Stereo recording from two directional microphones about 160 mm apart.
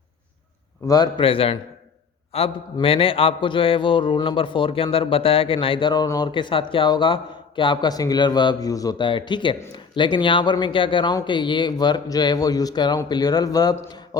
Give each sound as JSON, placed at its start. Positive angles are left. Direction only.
{"t": 0.9, "sound": "a man's voice", "side_deg": 25}